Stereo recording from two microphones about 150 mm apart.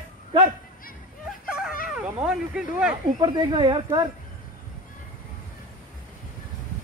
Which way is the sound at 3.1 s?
30° right (ahead or behind).